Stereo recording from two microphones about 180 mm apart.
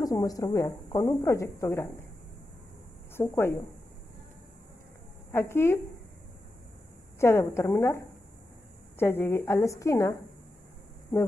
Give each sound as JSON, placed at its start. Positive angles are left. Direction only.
{"t": 0.0, "sound": "a woman's voice", "side_deg": 20}
{"t": 3.2, "sound": "a woman's voice", "side_deg": 15}
{"t": 5.3, "sound": "a woman's voice", "side_deg": 15}
{"t": 7.2, "sound": "a woman's voice", "side_deg": 15}